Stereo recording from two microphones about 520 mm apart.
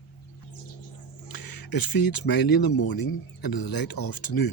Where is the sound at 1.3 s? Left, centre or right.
Left.